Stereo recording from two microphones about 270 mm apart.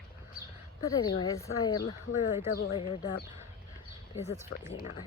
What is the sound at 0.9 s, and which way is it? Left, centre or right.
Speech, centre.